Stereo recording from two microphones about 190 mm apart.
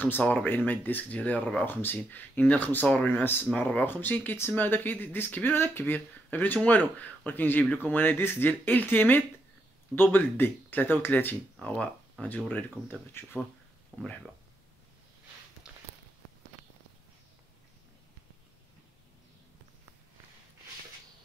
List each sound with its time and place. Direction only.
0.0 s speech: 10° left (ahead or behind)